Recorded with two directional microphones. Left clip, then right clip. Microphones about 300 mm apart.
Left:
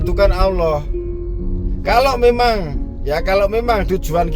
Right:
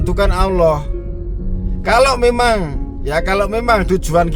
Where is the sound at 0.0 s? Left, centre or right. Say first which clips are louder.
Left 1 dB; centre.